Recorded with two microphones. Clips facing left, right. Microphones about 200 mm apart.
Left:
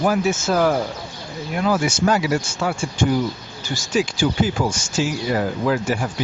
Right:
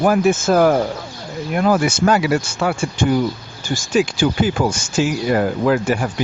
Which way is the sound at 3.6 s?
50° right (ahead or behind).